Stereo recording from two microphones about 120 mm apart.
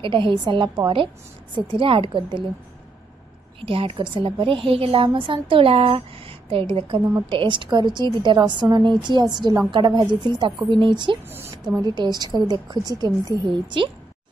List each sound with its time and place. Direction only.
0.0 s a woman's voice: 45° right (ahead or behind)
3.6 s a woman's voice: 45° right (ahead or behind)
11.2 s a woman's voice: 20° right (ahead or behind)
11.8 s a woman's voice: 35° right (ahead or behind)